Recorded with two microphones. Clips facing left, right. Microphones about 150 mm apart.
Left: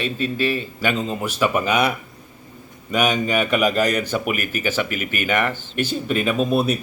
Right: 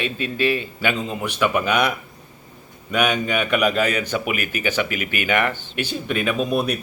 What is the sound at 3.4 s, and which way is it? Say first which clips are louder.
Speech: right 1 dB; centre (ahead or behind).